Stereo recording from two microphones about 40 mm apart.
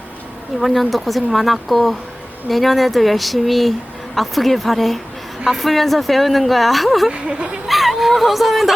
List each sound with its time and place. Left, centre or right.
0.6 s speech: centre
7.1 s speech: right
7.7 s a sound: centre